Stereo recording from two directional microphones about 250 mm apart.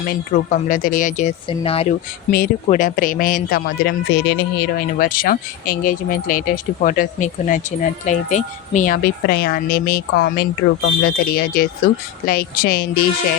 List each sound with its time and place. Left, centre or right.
0.1 s speech: left